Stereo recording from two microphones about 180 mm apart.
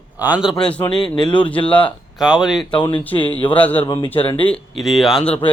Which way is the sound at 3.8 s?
30° left (ahead or behind).